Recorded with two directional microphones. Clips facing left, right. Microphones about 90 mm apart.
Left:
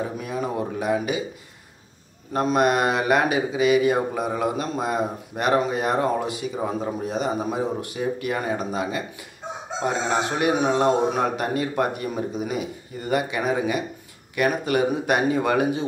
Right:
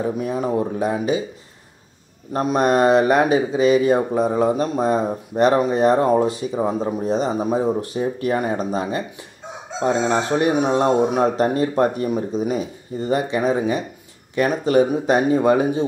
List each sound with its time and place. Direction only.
0.2 s speech: 30° right (ahead or behind)
2.3 s speech: 30° right (ahead or behind)
10.0 s speech: 30° right (ahead or behind)